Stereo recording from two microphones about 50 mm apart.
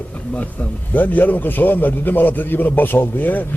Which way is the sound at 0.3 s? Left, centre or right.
Left.